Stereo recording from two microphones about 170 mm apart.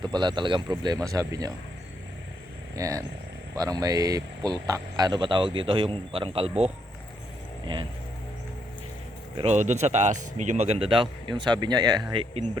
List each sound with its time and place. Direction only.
0.0 s speech: 25° right (ahead or behind)
2.7 s speech: 20° right (ahead or behind)
9.4 s speech: 40° right (ahead or behind)